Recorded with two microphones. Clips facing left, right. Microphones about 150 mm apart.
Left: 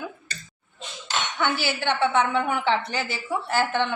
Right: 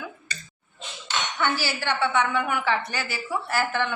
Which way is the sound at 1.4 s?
20° left (ahead or behind).